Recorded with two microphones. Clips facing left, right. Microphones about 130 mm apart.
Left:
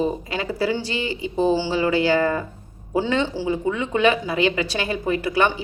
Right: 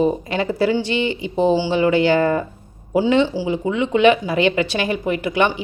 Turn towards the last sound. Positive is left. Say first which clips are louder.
# right 2 dB
turn(degrees=-20)  # may be behind; listen again after turning